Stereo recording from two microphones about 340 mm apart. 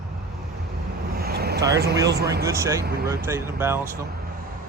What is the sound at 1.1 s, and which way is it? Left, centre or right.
Vehicle, right.